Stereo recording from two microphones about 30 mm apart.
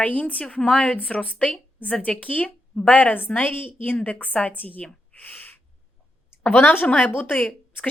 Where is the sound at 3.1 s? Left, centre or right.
Left.